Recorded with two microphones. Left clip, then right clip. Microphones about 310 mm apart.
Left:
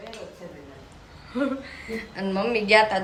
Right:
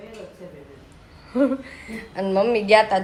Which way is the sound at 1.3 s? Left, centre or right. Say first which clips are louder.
Right 6 dB; centre.